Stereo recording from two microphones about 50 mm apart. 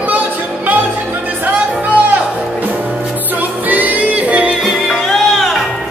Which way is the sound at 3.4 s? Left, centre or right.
Right.